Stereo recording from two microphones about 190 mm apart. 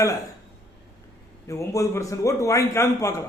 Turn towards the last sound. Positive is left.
turn(degrees=15)  # may be behind; listen again after turning